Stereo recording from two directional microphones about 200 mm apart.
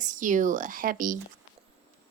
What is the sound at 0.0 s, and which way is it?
A woman's voice, 40° right (ahead or behind).